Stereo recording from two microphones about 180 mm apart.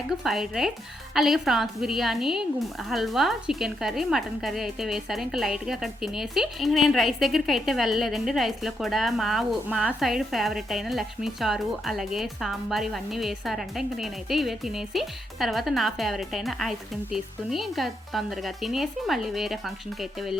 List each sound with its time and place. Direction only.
0.1 s a woman's voice: centre (ahead or behind)